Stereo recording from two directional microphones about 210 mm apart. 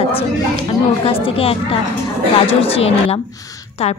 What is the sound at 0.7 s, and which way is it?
A woman's voice, 25° left (ahead or behind).